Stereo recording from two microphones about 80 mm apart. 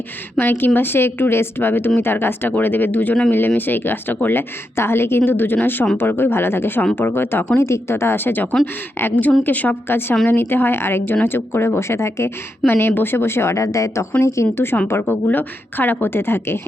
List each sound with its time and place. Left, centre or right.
0.3 s a woman's voice: left